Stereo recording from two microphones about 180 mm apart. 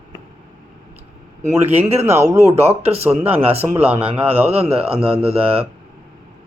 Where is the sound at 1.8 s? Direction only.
35° right (ahead or behind).